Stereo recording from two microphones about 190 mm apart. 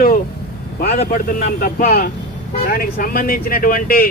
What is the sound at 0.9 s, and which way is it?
Speech, 35° left (ahead or behind).